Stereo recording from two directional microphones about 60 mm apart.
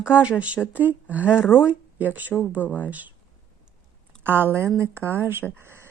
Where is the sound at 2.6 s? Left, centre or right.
Left.